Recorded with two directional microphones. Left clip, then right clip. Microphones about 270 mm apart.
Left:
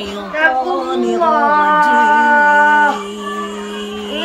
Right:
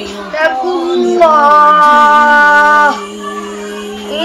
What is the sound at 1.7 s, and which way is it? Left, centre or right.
Music, right.